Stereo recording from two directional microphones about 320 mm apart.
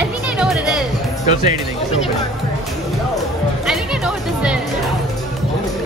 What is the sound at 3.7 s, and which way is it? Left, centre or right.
Music, centre.